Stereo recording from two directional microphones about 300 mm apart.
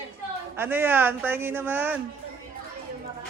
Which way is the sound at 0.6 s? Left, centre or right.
Centre.